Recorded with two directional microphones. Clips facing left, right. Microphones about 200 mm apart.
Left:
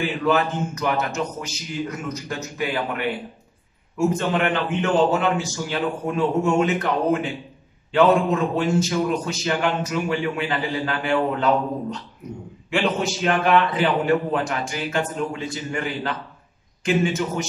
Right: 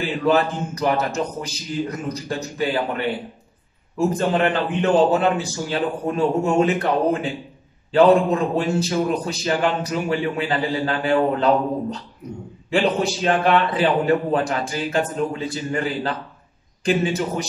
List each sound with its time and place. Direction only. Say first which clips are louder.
0.3 s a man's voice: right 3 dB; 35° right (ahead or behind)